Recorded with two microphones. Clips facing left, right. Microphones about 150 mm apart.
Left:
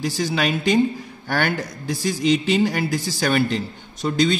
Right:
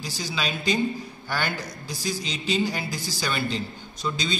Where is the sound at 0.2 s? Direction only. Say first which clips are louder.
Left 7 dB; 60° left (ahead or behind).